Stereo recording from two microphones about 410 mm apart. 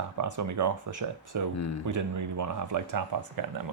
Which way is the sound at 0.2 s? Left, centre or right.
Right.